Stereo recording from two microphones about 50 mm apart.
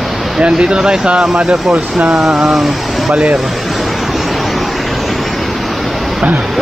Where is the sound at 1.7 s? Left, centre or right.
Right.